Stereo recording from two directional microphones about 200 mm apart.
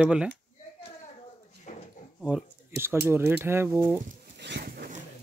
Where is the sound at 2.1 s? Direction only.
5° right (ahead or behind).